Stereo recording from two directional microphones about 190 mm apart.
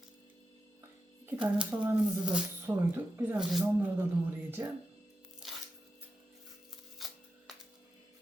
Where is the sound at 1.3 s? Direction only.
5° right (ahead or behind).